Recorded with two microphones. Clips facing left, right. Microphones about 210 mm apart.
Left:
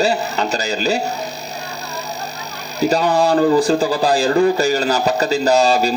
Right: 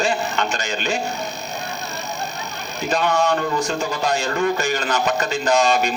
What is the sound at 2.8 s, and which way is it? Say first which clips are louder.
Speech: left 5 dB; 35° left (ahead or behind).